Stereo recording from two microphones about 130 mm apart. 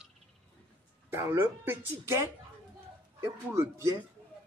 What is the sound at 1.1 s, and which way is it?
Speech, 20° right (ahead or behind).